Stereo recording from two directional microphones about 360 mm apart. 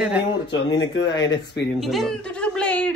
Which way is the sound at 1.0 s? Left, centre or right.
Centre.